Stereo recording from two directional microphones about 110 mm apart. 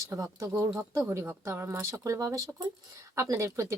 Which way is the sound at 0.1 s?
30° right (ahead or behind).